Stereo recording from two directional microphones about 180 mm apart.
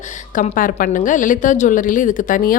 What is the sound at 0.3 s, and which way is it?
A woman's voice, 50° left (ahead or behind).